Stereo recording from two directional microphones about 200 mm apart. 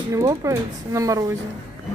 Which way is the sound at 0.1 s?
15° right (ahead or behind).